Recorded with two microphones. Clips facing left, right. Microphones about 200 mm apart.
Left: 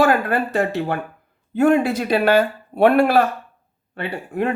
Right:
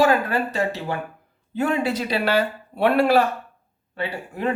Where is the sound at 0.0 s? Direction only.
55° left (ahead or behind).